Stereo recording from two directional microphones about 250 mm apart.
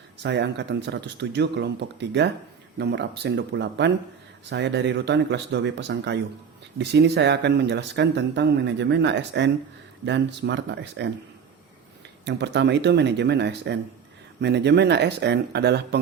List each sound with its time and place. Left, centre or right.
0.2 s speech: right
12.2 s speech: right